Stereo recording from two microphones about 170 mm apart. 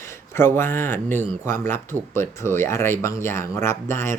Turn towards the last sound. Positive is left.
turn(degrees=15)  # may be behind; listen again after turning